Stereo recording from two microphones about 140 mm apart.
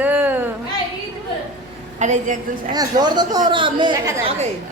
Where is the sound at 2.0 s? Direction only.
60° right (ahead or behind).